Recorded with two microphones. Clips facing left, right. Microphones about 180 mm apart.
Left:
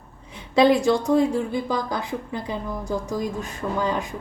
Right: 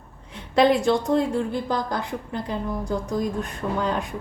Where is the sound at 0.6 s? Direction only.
Centre (ahead or behind).